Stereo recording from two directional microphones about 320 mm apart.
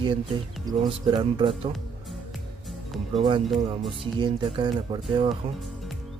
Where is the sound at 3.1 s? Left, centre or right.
Centre.